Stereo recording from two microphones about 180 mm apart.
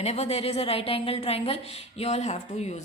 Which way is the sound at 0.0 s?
35° left (ahead or behind).